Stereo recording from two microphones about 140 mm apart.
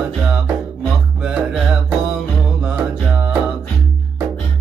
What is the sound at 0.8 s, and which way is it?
Music, centre (ahead or behind).